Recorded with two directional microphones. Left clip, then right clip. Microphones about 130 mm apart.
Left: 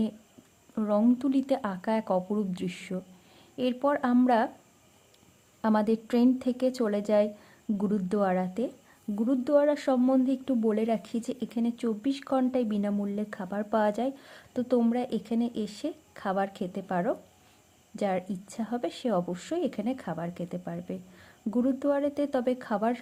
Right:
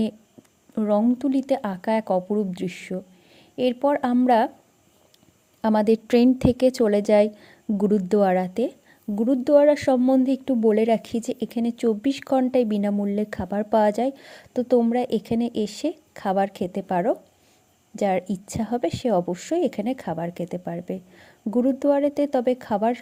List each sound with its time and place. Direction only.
0.8 s a woman's voice: 40° right (ahead or behind)
1.2 s a woman's voice: 25° right (ahead or behind)
5.6 s a woman's voice: 35° right (ahead or behind)